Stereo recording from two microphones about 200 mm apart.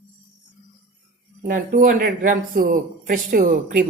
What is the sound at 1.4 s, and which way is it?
Speech, 40° right (ahead or behind).